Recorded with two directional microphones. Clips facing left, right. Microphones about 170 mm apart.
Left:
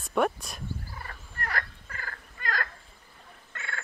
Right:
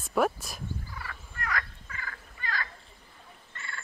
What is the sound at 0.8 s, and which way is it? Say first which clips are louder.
Turkey: right 1 dB; 40° left (ahead or behind).